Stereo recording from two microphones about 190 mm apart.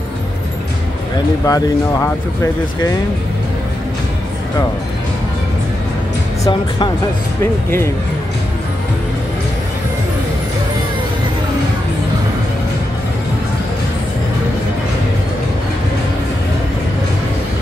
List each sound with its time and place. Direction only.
1.4 s speech: 15° left (ahead or behind)